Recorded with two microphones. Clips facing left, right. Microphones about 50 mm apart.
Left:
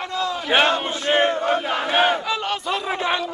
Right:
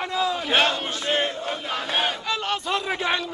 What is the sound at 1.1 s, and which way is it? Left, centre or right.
Battle cry, left.